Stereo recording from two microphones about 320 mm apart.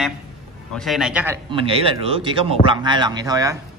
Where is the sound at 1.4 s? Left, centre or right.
Centre.